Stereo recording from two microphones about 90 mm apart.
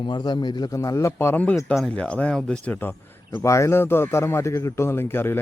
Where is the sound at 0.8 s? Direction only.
35° left (ahead or behind).